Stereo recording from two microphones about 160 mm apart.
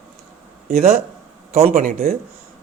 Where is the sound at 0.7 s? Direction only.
45° right (ahead or behind).